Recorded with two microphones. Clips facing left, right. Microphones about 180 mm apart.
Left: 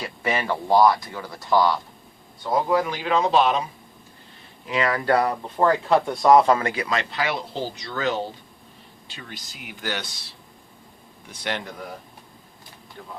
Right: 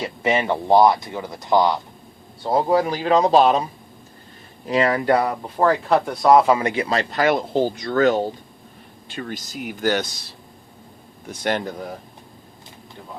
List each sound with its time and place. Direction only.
0.0 s speech: 20° right (ahead or behind)
2.4 s a man's voice: 30° right (ahead or behind)
4.9 s speech: 20° right (ahead or behind)
5.5 s speech: 5° right (ahead or behind)
6.7 s speech: 30° right (ahead or behind)